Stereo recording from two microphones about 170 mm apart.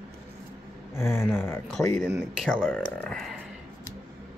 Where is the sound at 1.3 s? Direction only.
15° left (ahead or behind).